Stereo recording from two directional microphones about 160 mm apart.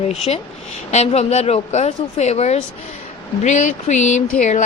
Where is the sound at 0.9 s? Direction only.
45° left (ahead or behind).